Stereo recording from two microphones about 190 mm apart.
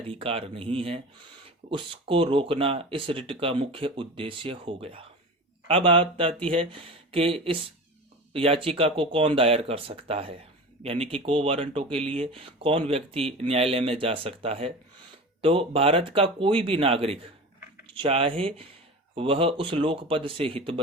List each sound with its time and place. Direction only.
0.1 s speech: 30° right (ahead or behind)